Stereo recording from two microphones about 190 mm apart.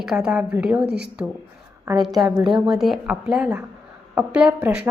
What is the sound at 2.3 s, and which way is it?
Speech, 25° right (ahead or behind).